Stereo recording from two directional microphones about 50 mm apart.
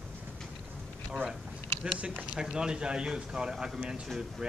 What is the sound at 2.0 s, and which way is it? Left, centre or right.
Speech, right.